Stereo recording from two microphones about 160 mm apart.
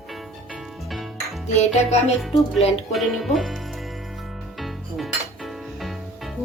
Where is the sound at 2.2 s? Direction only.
Centre (ahead or behind).